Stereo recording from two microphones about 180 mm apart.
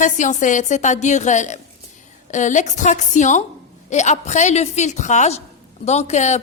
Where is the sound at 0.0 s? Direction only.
45° left (ahead or behind).